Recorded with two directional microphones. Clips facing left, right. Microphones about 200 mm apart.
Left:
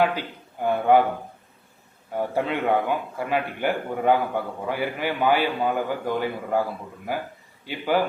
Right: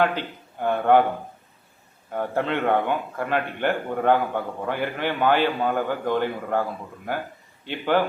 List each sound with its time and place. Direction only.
0.0 s a man's voice: 10° left (ahead or behind)
2.1 s a man's voice: 10° left (ahead or behind)